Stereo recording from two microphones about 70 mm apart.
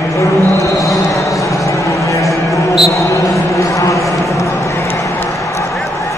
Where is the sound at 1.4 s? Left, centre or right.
Left.